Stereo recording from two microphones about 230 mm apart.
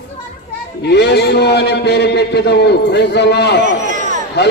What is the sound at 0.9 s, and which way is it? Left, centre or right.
A man's voice, left.